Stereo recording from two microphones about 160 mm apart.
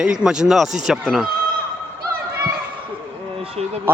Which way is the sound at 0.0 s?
5° right (ahead or behind).